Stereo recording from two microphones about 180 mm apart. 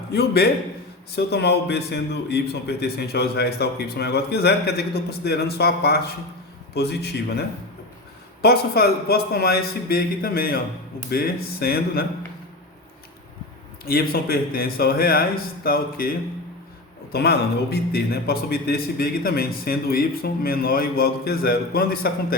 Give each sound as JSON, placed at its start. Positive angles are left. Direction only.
{"t": 0.1, "sound": "a man's voice", "side_deg": 65}
{"t": 13.8, "sound": "a man's voice", "side_deg": 55}